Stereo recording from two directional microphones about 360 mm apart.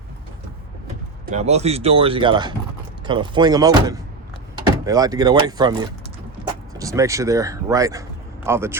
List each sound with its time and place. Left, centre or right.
1.3 s speech: centre